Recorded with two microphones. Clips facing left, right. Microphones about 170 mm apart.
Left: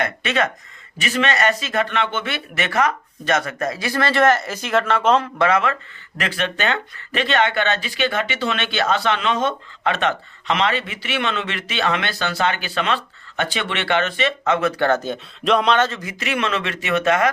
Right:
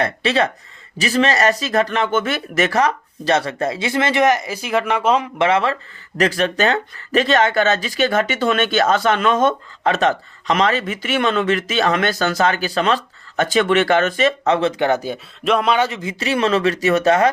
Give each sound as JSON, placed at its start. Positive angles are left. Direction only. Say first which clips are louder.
{"t": 0.0, "sound": "speech", "louder": "right 3 dB", "side_deg": -35}
{"t": 5.4, "sound": "speech", "louder": "right 2 dB", "side_deg": -30}
{"t": 6.1, "sound": "speech", "louder": "right 7 dB", "side_deg": -40}
{"t": 14.8, "sound": "speech", "louder": "right 1 dB", "side_deg": -15}
{"t": 16.0, "sound": "speech", "louder": "right 5 dB", "side_deg": -30}